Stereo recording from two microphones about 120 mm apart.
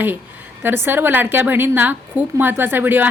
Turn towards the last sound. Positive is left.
turn(degrees=-15)  # may be behind; listen again after turning